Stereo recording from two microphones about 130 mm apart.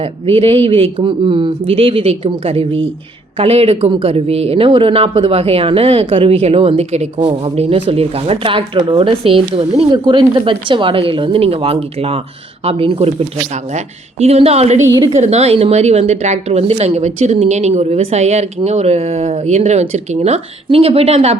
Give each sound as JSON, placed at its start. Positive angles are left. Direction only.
{"t": 0.0, "sound": "a woman's voice", "side_deg": -45}